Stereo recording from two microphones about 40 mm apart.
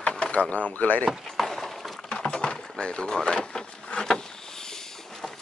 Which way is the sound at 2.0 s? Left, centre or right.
Left.